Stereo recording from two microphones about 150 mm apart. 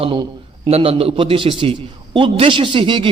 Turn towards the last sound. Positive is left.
turn(degrees=-35)  # may be behind; listen again after turning